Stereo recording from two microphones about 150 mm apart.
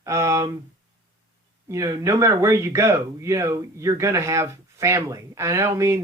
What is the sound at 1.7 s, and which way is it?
Speech, 20° right (ahead or behind).